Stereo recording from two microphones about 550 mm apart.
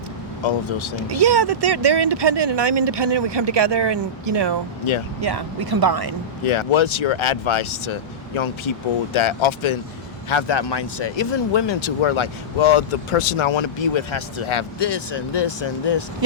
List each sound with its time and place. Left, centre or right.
1.2 s speech: right
6.4 s speech: left
9.1 s speech: left